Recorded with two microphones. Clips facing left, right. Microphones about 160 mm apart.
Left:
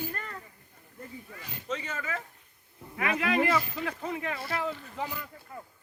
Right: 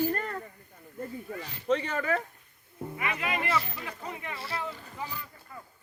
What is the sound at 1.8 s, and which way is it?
Speech, 55° right (ahead or behind).